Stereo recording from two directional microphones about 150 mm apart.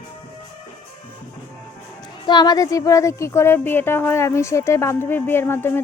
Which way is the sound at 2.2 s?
30° left (ahead or behind).